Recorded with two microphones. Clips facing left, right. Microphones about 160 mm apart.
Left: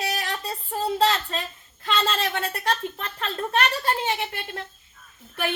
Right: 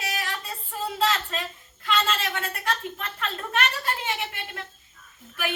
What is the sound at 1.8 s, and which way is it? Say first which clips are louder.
A woman's voice: left 1 dB; 35° left (ahead or behind).